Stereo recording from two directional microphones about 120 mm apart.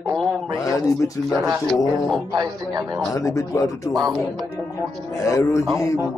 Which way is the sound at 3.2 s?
25° left (ahead or behind).